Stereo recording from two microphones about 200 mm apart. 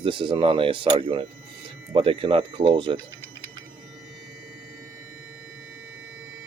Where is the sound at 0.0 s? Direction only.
25° right (ahead or behind).